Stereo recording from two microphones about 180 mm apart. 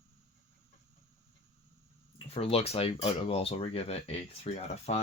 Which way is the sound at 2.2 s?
35° left (ahead or behind).